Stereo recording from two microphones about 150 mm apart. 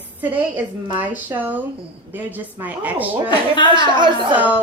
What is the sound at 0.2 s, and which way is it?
A woman's voice, 10° right (ahead or behind).